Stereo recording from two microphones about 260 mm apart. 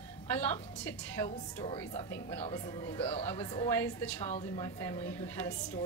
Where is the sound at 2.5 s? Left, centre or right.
Centre.